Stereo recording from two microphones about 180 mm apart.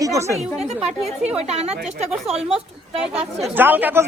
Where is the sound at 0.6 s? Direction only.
35° right (ahead or behind).